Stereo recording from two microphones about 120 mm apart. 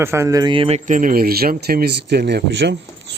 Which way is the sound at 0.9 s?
90° right.